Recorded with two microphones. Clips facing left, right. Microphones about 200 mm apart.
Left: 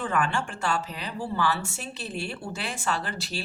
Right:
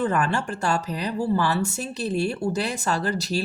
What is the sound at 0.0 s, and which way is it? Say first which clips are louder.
Speech: right 4 dB; 40° right (ahead or behind).